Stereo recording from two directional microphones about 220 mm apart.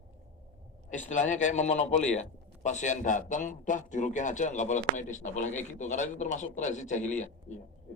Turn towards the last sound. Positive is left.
turn(degrees=30)  # may be behind; listen again after turning